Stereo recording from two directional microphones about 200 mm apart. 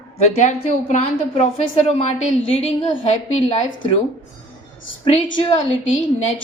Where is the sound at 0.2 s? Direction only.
35° left (ahead or behind).